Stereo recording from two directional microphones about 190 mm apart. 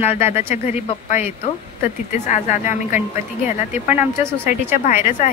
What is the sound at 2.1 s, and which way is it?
Speech, 40° left (ahead or behind).